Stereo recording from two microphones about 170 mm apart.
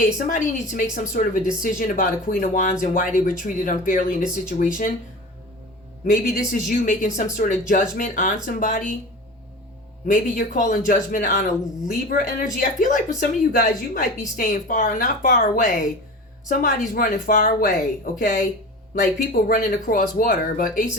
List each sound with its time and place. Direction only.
0.3 s a woman's voice: 50° left (ahead or behind)
4.2 s speech: 5° right (ahead or behind)
6.1 s a woman's voice: 55° left (ahead or behind)
10.1 s a woman's voice: 50° left (ahead or behind)
12.5 s a woman's voice: 50° left (ahead or behind)